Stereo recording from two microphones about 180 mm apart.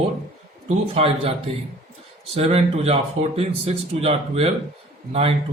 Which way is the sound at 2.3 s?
35° right (ahead or behind).